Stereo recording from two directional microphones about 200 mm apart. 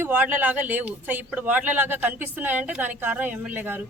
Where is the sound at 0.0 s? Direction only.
10° right (ahead or behind).